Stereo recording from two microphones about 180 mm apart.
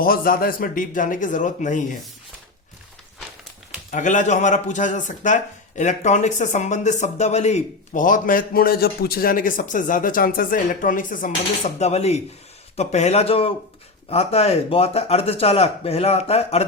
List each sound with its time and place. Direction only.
0.0 s speech: 55° left (ahead or behind)
3.9 s speech: 45° left (ahead or behind)